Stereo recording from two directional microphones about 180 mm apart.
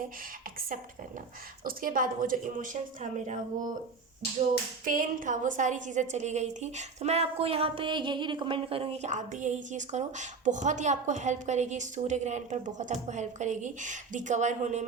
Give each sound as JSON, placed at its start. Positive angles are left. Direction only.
{"t": 1.6, "sound": "a woman's voice", "side_deg": -50}
{"t": 4.9, "sound": "a woman's voice", "side_deg": -45}